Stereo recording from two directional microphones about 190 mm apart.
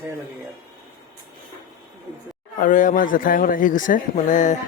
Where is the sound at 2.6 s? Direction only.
45° left (ahead or behind).